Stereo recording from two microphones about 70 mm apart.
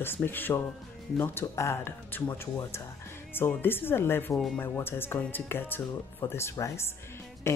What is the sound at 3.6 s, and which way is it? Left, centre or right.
Speech, left.